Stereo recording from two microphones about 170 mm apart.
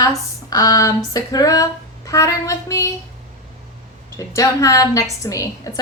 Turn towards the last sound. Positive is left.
turn(degrees=20)  # may be behind; listen again after turning